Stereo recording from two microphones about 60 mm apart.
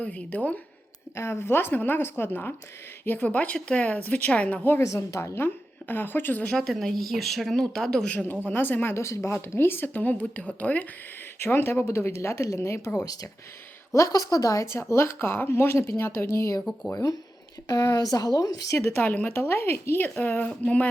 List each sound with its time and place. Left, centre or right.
0.0 s a woman's voice: left
1.1 s a woman's voice: left; by 4.6 s centre
4.9 s speech: left
5.9 s speech: left
6.6 s speech: centre
8.4 s speech: left
9.0 s speech: left
11.3 s speech: left
13.9 s speech: left
16.9 s speech: left
17.7 s speech: left
18.8 s speech: left
19.0 s a woman's voice: left
19.3 s a woman's voice: left